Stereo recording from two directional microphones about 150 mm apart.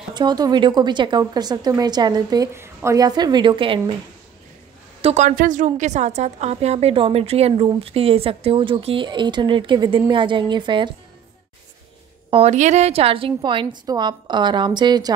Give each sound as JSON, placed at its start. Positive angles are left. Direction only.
{"t": 0.1, "sound": "a woman's voice", "side_deg": -30}
{"t": 5.0, "sound": "a woman's voice", "side_deg": -50}
{"t": 12.3, "sound": "a woman's voice", "side_deg": -45}